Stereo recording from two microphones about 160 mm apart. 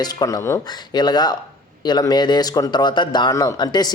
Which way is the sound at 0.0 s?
25° left (ahead or behind).